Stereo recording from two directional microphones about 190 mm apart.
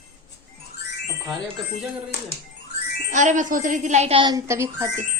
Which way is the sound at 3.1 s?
40° right (ahead or behind).